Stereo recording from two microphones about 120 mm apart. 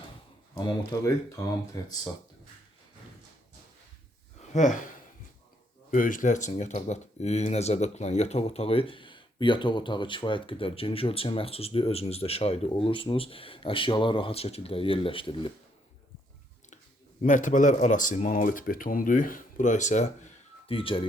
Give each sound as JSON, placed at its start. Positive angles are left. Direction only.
{"t": 0.5, "sound": "speech", "side_deg": 35}
{"t": 4.5, "sound": "a man's voice", "side_deg": 90}
{"t": 5.9, "sound": "a man's voice", "side_deg": 90}
{"t": 6.5, "sound": "speech", "side_deg": 75}
{"t": 17.2, "sound": "a man's voice", "side_deg": 90}
{"t": 20.7, "sound": "speech", "side_deg": 50}